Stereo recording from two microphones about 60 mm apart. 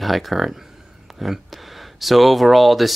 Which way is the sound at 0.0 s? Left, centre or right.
Centre.